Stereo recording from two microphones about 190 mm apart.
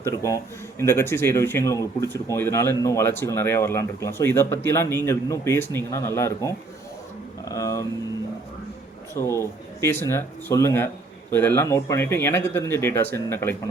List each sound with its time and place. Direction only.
0.0 s speech: 15° left (ahead or behind)
9.2 s speech: 15° left (ahead or behind)